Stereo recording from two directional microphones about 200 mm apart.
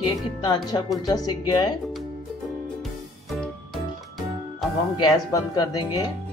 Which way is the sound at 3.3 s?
Centre (ahead or behind).